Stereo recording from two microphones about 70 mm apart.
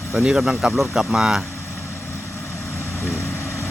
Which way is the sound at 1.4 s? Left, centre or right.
Left.